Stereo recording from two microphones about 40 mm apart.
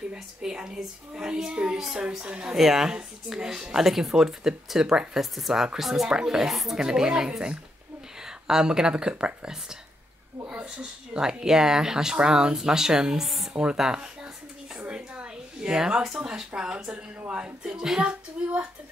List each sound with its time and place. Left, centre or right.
0.1 s speech: right
2.5 s speech: centre
5.2 s speech: centre
5.5 s speech: centre
6.0 s speech: centre
6.5 s speech: centre
6.8 s speech: centre
13.5 s speech: right
14.8 s a sound: right
16.3 s speech: centre
17.7 s speech: centre